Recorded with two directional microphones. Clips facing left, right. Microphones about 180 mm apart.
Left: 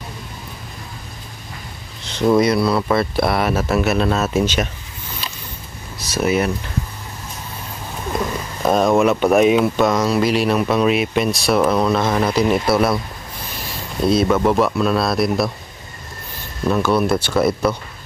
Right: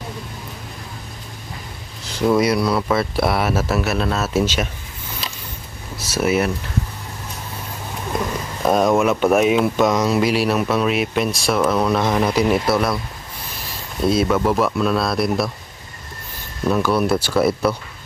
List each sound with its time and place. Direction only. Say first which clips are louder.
2.2 s speech: left 2 dB; 5° right (ahead or behind)
5.9 s speech: even; 5° right (ahead or behind)
8.6 s speech: left 1 dB; 5° right (ahead or behind)
9.9 s speech: even; 15° right (ahead or behind)
10.3 s speech: left 1 dB; 5° right (ahead or behind)
14.1 s speech: left 3 dB; centre (ahead or behind)
16.6 s speech: left 1 dB; centre (ahead or behind)